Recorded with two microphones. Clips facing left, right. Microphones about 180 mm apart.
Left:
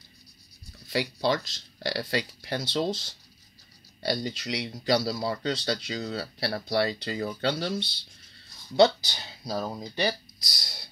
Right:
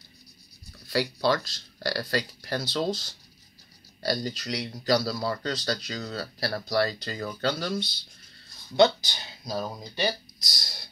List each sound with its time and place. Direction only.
0.8 s speech: 20° left (ahead or behind)